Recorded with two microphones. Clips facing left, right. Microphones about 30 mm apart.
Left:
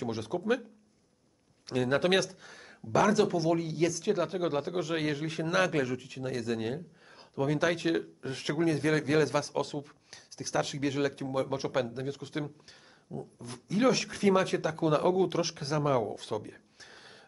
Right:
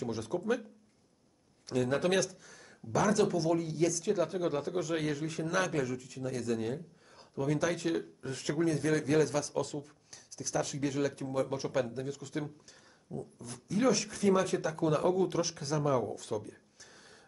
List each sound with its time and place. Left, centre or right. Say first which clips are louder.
0.0 s speech: left 1 dB; left
1.7 s speech: left 3 dB; left